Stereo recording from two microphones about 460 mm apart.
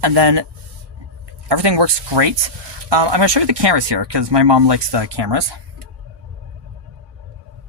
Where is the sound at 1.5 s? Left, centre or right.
Right.